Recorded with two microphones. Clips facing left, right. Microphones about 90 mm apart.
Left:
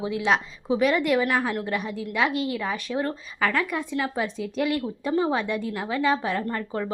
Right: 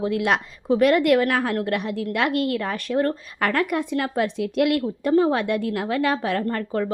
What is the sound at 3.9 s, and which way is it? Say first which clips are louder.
A woman's voice: right 4 dB; 60° right (ahead or behind).